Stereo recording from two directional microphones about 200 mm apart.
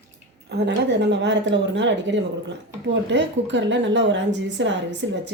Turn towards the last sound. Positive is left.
turn(degrees=-65)  # may be behind; listen again after turning